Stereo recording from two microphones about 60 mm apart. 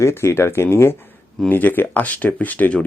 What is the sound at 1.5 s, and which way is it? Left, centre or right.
Speech, left.